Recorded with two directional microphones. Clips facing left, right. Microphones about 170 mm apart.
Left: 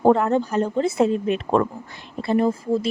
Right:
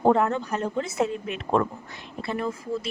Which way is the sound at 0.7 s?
30° left (ahead or behind).